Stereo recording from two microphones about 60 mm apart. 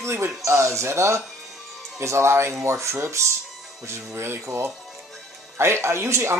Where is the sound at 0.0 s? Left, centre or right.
Right.